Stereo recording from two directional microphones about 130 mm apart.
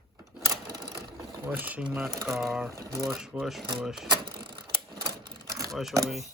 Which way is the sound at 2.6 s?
25° right (ahead or behind).